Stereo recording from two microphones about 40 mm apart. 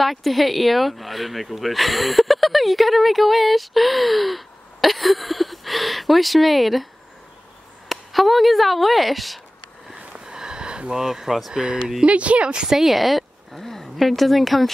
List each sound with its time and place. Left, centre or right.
0.0 s speech: centre
7.9 s speech: centre
10.2 s a sound: centre
11.1 s speech: centre
11.5 s speech: right
12.6 s speech: centre